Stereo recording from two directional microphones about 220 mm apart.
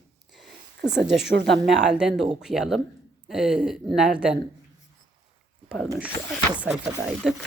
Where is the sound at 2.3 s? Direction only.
Centre (ahead or behind).